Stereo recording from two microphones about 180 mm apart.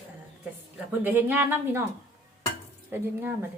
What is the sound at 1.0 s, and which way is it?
Speech, 10° right (ahead or behind).